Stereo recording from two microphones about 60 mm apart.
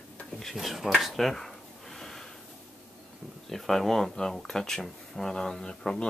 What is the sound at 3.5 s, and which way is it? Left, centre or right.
Speech, centre.